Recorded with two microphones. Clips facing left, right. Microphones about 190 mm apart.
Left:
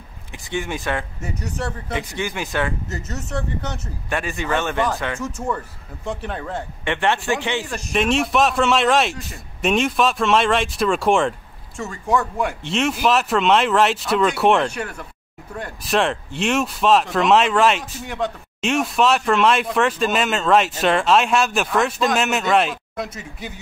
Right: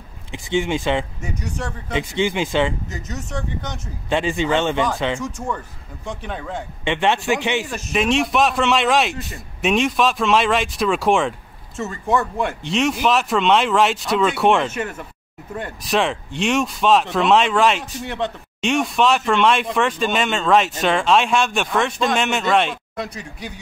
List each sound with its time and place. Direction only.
0.3 s speech: 20° right (ahead or behind)
2.9 s speech: 5° left (ahead or behind)
4.1 s speech: 25° right (ahead or behind)
6.0 s speech: centre (ahead or behind)
6.8 s a man's voice: 20° right (ahead or behind)
7.6 s speech: centre (ahead or behind)